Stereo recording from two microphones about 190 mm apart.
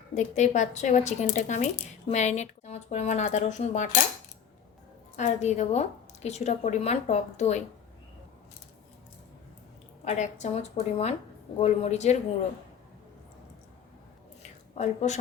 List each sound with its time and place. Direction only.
0.1 s speech: 40° left (ahead or behind)
5.1 s speech: 35° left (ahead or behind)
10.0 s speech: 35° left (ahead or behind)
14.8 s speech: 35° left (ahead or behind)